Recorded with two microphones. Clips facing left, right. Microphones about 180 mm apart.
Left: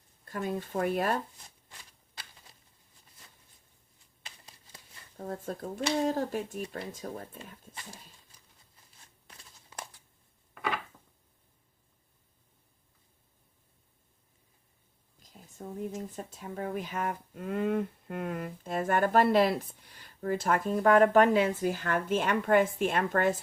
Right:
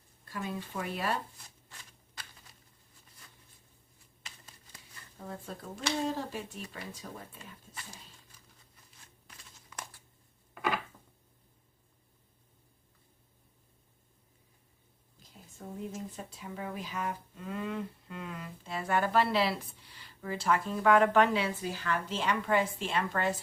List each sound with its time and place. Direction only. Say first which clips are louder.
0.3 s speech: left 5 dB; 45° left (ahead or behind)
5.1 s speech: left 6 dB; 45° left (ahead or behind)
15.6 s speech: left 3 dB; 40° left (ahead or behind)